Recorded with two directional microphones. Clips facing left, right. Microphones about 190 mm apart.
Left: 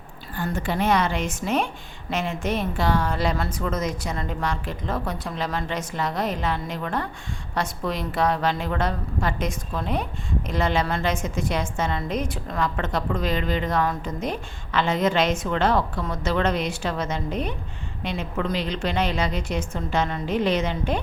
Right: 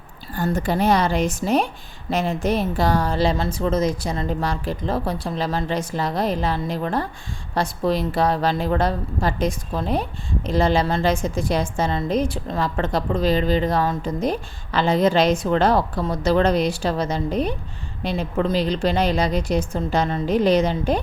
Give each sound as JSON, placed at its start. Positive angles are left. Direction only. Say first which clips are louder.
{"t": 0.3, "sound": "a woman's voice", "louder": "right 4 dB", "side_deg": -40}